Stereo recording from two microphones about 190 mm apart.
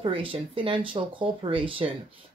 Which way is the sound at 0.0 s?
25° right (ahead or behind).